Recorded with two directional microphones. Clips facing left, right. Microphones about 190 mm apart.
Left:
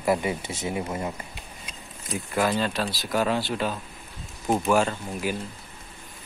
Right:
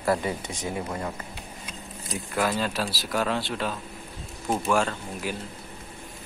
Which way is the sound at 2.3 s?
Centre (ahead or behind).